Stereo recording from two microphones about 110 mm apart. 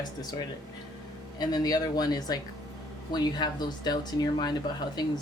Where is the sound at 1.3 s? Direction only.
35° left (ahead or behind).